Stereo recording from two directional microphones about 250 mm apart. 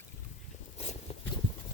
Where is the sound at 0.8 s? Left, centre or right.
Left.